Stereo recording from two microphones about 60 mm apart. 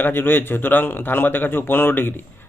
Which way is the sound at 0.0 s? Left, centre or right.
Left.